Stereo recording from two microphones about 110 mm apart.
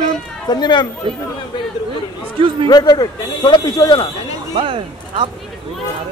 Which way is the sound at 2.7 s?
40° left (ahead or behind).